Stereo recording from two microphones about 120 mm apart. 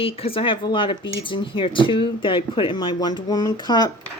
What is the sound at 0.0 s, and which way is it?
Speech, 50° left (ahead or behind).